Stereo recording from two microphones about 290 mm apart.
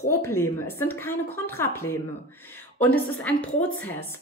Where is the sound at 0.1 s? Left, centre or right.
Centre.